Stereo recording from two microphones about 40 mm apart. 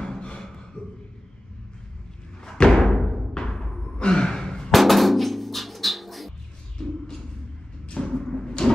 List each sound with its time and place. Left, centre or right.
0.0 s beatboxing: left
0.8 s a sound: left
2.4 s thump: left
2.8 s music: centre
4.0 s sigh: centre
4.7 s music: centre
7.9 s a sound: centre
8.3 s cupboard open or close: centre